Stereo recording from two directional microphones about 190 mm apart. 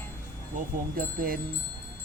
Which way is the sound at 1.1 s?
50° right (ahead or behind).